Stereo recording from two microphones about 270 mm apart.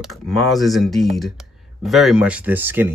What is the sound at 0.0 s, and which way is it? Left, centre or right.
Speech, centre.